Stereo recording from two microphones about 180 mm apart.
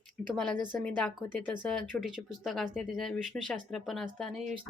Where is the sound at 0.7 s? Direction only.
5° left (ahead or behind).